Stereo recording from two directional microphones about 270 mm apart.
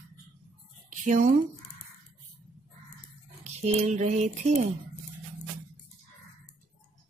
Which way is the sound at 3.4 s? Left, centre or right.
Right.